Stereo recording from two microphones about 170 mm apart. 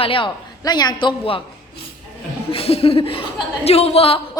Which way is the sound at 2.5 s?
35° left (ahead or behind).